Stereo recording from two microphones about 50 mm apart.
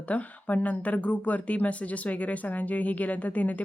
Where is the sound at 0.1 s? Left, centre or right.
Left.